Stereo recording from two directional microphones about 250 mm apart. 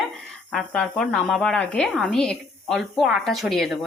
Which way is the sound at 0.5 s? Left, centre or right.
Centre.